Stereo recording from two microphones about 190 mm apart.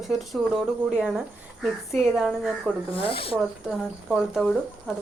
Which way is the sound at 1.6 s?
Centre (ahead or behind).